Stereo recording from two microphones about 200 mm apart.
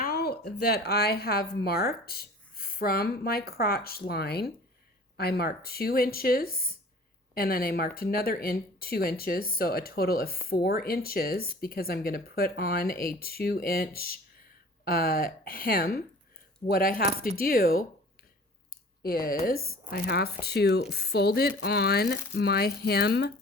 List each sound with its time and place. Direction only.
0.0 s speech: 50° left (ahead or behind)
19.2 s speech: 45° left (ahead or behind)